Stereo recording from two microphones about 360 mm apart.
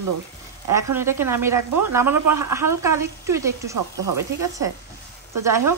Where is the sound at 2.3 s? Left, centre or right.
Right.